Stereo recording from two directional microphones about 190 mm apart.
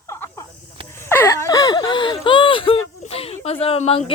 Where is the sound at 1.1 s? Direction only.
15° left (ahead or behind); by 2.8 s 30° left (ahead or behind).